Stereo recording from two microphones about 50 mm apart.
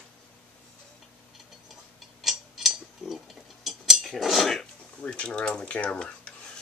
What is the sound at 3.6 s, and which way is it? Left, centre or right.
Cutlery, centre.